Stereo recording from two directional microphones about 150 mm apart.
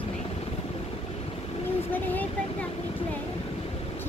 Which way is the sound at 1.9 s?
10° left (ahead or behind).